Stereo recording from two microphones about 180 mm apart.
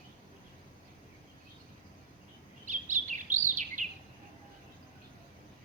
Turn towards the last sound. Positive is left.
turn(degrees=-45)  # may be behind; listen again after turning